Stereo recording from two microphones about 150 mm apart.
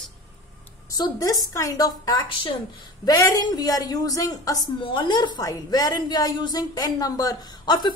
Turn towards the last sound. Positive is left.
turn(degrees=30)  # may be behind; listen again after turning